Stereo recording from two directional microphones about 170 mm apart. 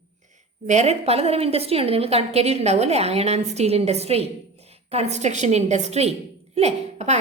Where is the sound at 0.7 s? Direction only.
40° right (ahead or behind).